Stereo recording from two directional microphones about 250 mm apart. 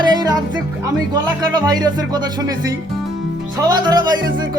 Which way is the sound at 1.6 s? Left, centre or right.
Centre.